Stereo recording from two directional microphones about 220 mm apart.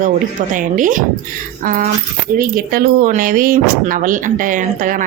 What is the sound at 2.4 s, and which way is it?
Speech, 40° right (ahead or behind).